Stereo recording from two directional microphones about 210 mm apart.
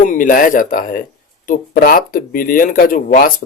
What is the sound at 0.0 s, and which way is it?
Speech, 40° left (ahead or behind).